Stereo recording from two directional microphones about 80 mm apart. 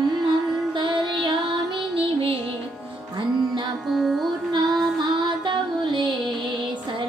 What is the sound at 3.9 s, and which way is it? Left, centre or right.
Music, centre.